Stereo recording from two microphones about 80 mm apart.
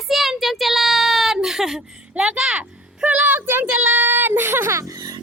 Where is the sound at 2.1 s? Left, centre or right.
Centre.